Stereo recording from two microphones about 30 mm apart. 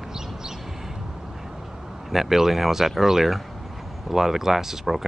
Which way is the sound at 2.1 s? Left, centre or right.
Centre.